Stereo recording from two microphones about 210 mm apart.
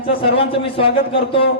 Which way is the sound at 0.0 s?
25° left (ahead or behind).